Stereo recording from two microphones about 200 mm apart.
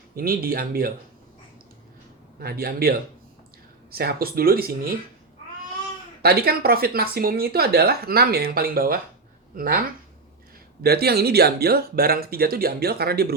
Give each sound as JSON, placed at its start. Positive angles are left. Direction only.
{"t": 0.2, "sound": "speech", "side_deg": -50}
{"t": 2.4, "sound": "speech", "side_deg": -50}
{"t": 3.9, "sound": "speech", "side_deg": -50}
{"t": 6.2, "sound": "speech", "side_deg": -50}